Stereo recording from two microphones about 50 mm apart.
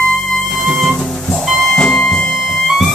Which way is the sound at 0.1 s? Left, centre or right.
Centre.